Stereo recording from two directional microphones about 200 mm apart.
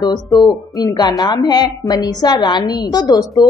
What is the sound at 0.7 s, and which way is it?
A woman's voice, 20° left (ahead or behind).